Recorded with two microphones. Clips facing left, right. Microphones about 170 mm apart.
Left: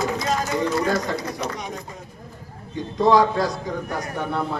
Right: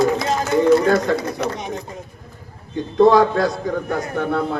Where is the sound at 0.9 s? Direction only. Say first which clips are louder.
Right 6 dB; 60° right (ahead or behind).